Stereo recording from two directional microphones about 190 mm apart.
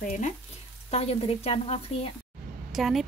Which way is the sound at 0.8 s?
30° left (ahead or behind).